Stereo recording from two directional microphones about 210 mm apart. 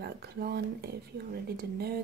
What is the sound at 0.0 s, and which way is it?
Speech, 50° right (ahead or behind).